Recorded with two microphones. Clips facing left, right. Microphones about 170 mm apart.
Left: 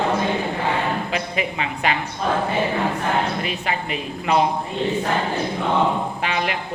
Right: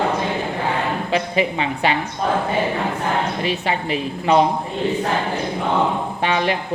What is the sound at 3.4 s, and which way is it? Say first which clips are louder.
Speech: right 4 dB; 30° right (ahead or behind).